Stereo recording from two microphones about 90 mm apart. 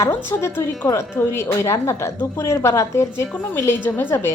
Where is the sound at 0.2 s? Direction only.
30° left (ahead or behind).